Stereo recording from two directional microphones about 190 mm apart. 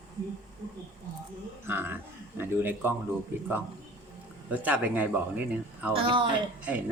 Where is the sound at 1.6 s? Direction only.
10° right (ahead or behind).